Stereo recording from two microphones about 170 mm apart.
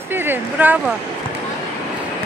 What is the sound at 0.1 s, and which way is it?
Speech, 10° right (ahead or behind).